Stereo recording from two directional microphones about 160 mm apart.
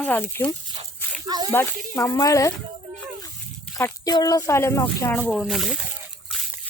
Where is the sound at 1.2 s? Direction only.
25° right (ahead or behind).